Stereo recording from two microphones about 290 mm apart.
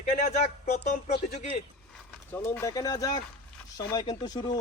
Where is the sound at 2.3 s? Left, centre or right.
Centre.